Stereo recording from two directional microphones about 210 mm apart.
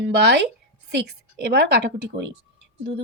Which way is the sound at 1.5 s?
50° right (ahead or behind).